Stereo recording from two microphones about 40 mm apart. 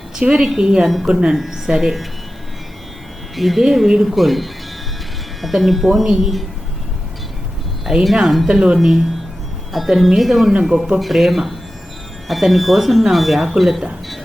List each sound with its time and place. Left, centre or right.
0.2 s speech: centre
1.4 s speech: centre
3.3 s speech: centre
7.9 s speech: centre
9.7 s speech: centre